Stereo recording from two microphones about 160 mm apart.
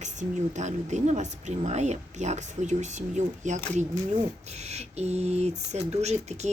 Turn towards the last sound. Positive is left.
turn(degrees=-45)  # may be behind; listen again after turning